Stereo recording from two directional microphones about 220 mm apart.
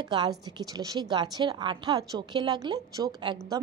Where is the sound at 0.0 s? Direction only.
20° right (ahead or behind).